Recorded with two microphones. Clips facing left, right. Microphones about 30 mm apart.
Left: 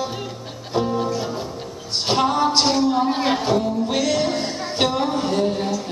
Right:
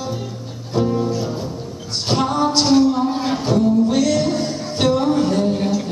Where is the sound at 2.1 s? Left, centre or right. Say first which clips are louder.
Even; centre; by 3.4 s left.